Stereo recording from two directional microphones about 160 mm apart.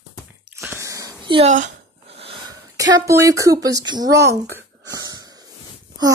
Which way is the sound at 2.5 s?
25° right (ahead or behind).